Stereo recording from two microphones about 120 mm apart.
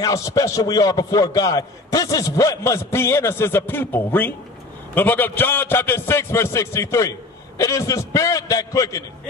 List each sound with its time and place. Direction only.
0.0 s a man's voice: 25° left (ahead or behind)